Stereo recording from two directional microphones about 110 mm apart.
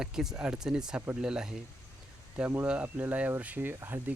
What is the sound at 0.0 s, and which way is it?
Speech, 5° right (ahead or behind).